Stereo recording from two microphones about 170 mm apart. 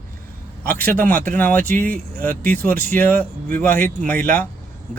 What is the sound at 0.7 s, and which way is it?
Speech, 10° left (ahead or behind).